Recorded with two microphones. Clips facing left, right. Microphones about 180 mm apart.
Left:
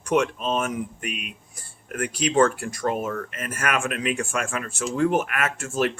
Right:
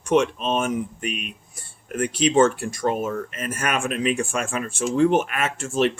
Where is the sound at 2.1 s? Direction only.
25° right (ahead or behind).